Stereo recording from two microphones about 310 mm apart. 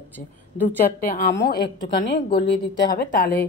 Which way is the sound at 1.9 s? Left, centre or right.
Left.